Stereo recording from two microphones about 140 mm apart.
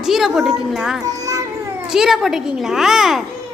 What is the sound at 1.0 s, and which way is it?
Children playing, 25° right (ahead or behind).